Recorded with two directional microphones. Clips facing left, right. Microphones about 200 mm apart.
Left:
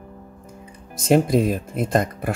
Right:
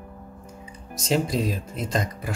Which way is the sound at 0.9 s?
55° left (ahead or behind).